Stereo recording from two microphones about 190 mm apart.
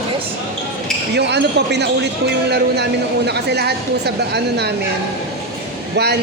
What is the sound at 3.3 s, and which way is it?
Speech, 60° right (ahead or behind).